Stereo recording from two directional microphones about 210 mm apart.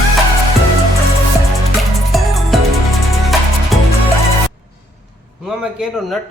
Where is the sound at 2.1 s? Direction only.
Centre (ahead or behind).